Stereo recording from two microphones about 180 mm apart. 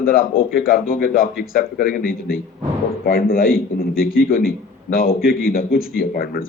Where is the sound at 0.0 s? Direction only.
50° left (ahead or behind).